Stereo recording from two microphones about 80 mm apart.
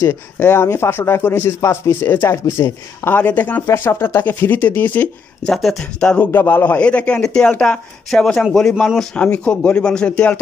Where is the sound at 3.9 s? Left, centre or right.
Left.